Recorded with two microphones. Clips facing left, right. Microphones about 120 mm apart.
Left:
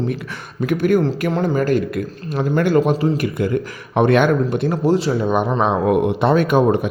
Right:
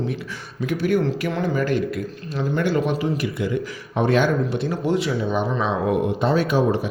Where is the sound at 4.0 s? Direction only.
60° left (ahead or behind).